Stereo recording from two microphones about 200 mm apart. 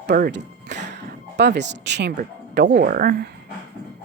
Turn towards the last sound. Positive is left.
turn(degrees=-45)  # may be behind; listen again after turning